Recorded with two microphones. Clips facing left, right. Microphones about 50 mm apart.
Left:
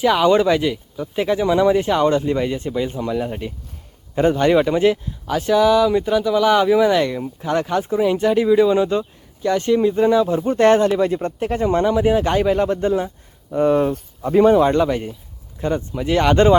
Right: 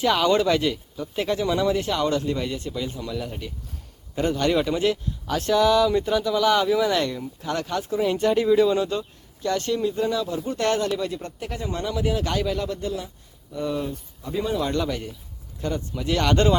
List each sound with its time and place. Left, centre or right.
0.0 s speech: centre
5.3 s speech: centre
8.0 s speech: centre; by 14.6 s left
14.6 s speech: left